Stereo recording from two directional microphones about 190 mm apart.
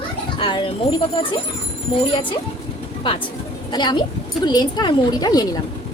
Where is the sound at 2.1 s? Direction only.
25° left (ahead or behind).